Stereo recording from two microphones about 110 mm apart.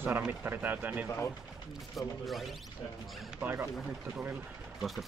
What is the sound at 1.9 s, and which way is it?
Speech, centre (ahead or behind).